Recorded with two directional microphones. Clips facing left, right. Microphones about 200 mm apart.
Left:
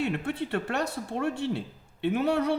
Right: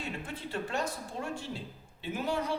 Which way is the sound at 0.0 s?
65° left (ahead or behind).